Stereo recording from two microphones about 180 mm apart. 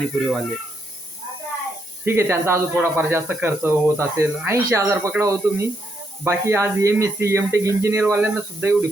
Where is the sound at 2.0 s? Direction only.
15° right (ahead or behind).